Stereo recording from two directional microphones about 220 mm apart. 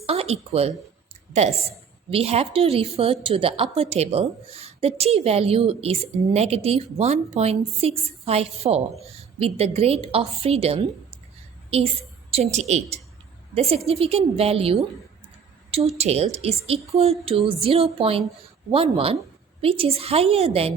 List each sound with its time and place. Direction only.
0.0 s a woman's voice: 25° right (ahead or behind)
12.3 s a woman's voice: 30° right (ahead or behind)
16.0 s a woman's voice: 30° right (ahead or behind)